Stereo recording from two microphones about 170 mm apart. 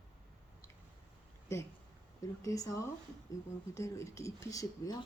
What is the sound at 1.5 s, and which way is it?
Speech, 15° left (ahead or behind).